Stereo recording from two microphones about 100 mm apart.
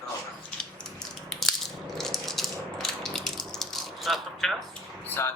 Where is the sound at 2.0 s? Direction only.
5° left (ahead or behind).